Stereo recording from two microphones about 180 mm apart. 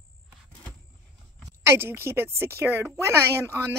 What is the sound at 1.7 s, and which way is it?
A woman's voice, 15° right (ahead or behind).